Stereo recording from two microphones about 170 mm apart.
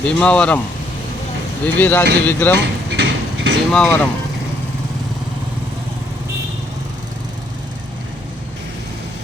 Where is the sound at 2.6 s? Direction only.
90° right.